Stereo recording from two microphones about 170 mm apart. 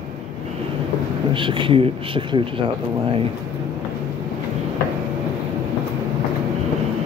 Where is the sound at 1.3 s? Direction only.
30° right (ahead or behind).